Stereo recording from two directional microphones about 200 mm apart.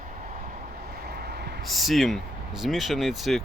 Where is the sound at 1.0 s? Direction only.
55° right (ahead or behind).